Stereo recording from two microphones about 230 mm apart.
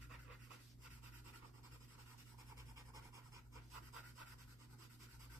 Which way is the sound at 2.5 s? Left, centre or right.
Centre.